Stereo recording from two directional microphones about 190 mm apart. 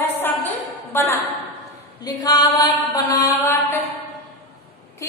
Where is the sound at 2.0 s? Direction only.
20° left (ahead or behind).